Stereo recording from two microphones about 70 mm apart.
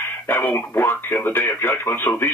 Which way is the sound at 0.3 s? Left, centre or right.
Left.